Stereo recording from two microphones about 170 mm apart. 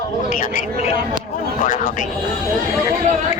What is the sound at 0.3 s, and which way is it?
Speech, 50° left (ahead or behind).